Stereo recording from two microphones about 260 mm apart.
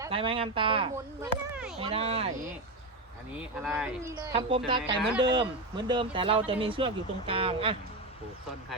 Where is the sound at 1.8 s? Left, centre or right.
Right.